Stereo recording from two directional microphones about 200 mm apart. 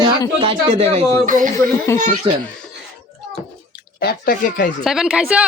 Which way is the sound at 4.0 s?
45° left (ahead or behind).